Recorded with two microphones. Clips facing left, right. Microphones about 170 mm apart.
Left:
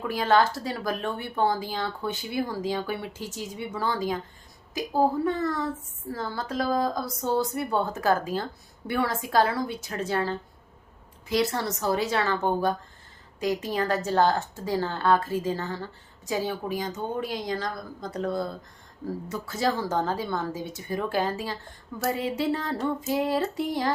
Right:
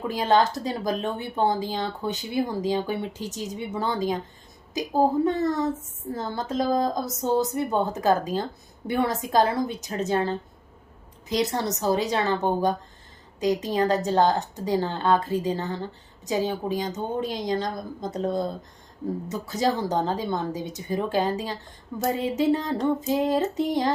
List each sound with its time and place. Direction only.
0.0 s a woman's voice: 20° right (ahead or behind)